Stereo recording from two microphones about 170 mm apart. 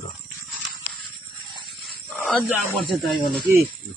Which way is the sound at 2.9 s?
Centre (ahead or behind).